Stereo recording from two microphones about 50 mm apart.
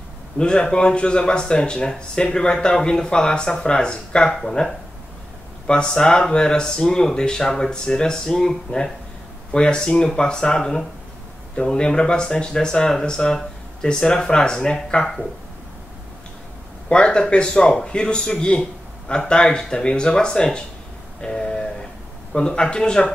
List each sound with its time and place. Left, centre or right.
0.4 s speech: centre
9.5 s speech: centre
16.9 s speech: centre
21.2 s a sound: centre
22.3 s speech: centre